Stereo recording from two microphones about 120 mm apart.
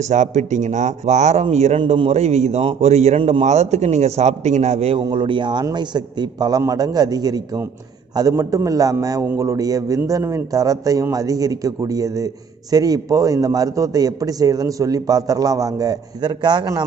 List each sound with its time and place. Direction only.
0.1 s a man's voice: 75° right (ahead or behind)
1.8 s a man's voice: 50° right (ahead or behind)
3.2 s a man's voice: 50° right (ahead or behind)
3.4 s a man's voice: 70° right (ahead or behind)
5.0 s a man's voice: 40° right (ahead or behind)